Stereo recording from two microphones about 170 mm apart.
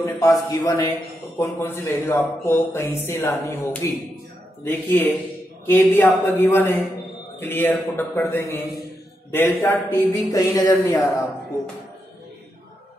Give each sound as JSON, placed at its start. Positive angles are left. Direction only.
{"t": 0.0, "sound": "speech", "side_deg": 20}